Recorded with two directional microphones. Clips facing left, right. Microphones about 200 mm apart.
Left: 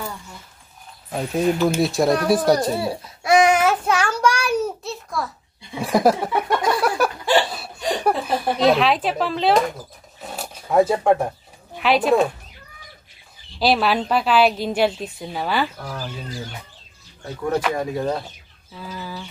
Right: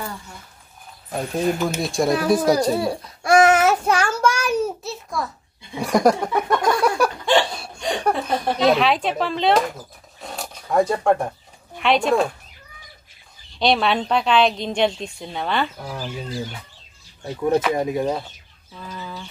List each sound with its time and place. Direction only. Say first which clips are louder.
1.1 s a woman's voice: left 2 dB; 5° left (ahead or behind)
5.8 s a sound: even; 5° left (ahead or behind)
10.3 s zipper: left 2 dB; 5° left (ahead or behind)
11.7 s speech: left 1 dB; centre (ahead or behind)
13.6 s a woman's voice: even; 5° left (ahead or behind)
17.2 s speech: right 3 dB; 15° right (ahead or behind)
18.8 s a woman's voice: left 2 dB; 5° left (ahead or behind)